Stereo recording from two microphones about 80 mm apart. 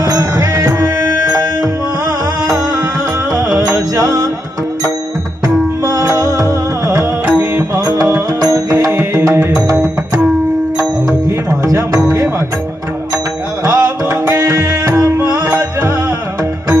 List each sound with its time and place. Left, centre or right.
0.0 s music: right
0.7 s music: right
3.3 s music: right
5.9 s music: right
7.2 s music: right
7.7 s music: right
11.6 s music: right
13.7 s music: right
15.3 s music: right